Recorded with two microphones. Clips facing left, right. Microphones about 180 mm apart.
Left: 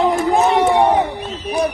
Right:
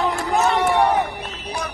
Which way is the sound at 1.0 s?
15° left (ahead or behind).